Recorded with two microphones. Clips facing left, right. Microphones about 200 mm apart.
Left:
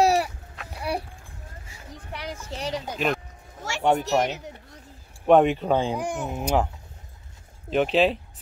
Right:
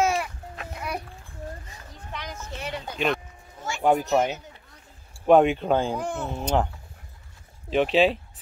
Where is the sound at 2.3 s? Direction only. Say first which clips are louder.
Left 5 dB; 40° left (ahead or behind).